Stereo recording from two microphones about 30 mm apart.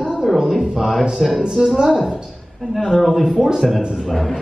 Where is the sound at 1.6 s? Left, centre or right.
Centre.